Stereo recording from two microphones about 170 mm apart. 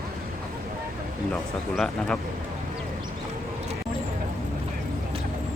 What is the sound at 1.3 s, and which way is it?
Speech, centre (ahead or behind).